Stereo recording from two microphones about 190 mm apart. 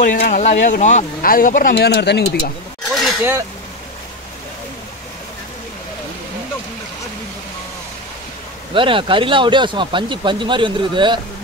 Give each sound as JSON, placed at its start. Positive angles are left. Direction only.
{"t": 0.0, "sound": "speech", "side_deg": 45}
{"t": 2.9, "sound": "a sound", "side_deg": 0}
{"t": 8.7, "sound": "speech", "side_deg": -25}